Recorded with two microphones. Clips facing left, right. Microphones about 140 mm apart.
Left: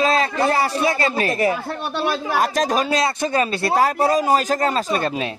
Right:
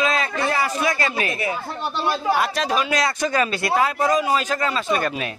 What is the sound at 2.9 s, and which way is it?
A man's voice, 25° left (ahead or behind).